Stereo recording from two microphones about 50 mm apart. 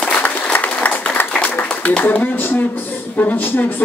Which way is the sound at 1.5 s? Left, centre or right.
Left.